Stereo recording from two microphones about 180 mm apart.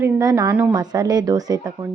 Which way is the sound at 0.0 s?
15° right (ahead or behind).